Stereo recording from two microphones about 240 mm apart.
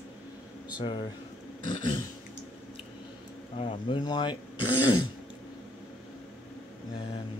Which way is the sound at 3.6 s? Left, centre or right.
Left.